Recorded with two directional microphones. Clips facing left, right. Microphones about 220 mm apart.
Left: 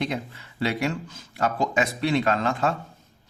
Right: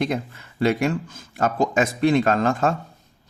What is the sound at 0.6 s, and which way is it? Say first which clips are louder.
A man's voice: right 5 dB; 50° right (ahead or behind).